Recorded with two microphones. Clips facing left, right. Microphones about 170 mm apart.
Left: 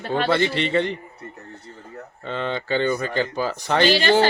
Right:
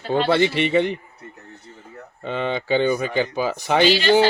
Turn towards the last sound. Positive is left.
turn(degrees=50)  # may be behind; listen again after turning